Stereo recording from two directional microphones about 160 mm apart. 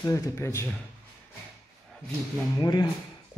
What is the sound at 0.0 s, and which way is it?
Speech, 15° left (ahead or behind).